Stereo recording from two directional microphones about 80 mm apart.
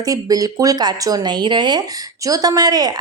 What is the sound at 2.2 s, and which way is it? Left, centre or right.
Speech, right.